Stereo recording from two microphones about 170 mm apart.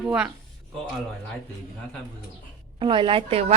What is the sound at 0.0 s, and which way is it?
Speech, 5° right (ahead or behind).